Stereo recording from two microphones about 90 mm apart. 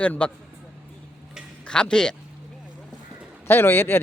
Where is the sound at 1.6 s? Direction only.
10° left (ahead or behind).